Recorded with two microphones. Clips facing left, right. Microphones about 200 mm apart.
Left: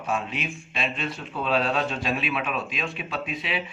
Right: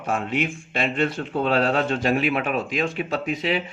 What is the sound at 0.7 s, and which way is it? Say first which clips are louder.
Speech: right 8 dB; 65° right (ahead or behind).